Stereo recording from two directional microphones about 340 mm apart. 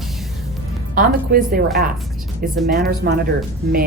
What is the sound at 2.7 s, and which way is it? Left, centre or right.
Speech, right.